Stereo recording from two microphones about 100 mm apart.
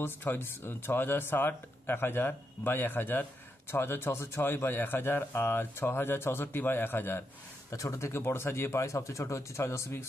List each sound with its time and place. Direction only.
0.0 s a man's voice: 20° left (ahead or behind)
7.7 s a man's voice: 35° left (ahead or behind)